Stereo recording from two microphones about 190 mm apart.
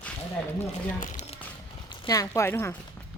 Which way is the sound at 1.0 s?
40° left (ahead or behind).